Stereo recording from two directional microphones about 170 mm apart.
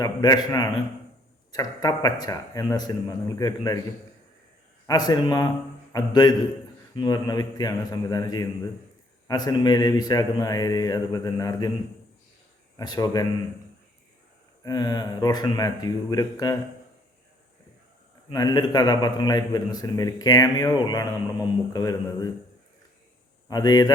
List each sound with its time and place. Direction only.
0.0 s a man's voice: 20° left (ahead or behind)
4.9 s a man's voice: 25° left (ahead or behind)
12.7 s a man's voice: 20° left (ahead or behind)
14.6 s a man's voice: 25° left (ahead or behind)
18.3 s a man's voice: 25° left (ahead or behind)
23.5 s a man's voice: 25° left (ahead or behind)